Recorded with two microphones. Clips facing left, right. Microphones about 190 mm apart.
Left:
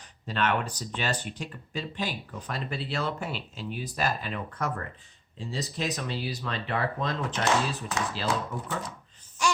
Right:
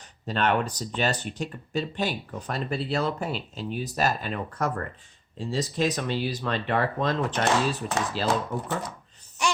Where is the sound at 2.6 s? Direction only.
40° right (ahead or behind).